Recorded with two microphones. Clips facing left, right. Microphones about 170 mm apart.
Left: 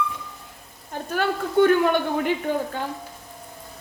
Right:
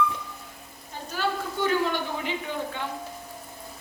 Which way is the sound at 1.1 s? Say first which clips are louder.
Left 4 dB; 55° left (ahead or behind).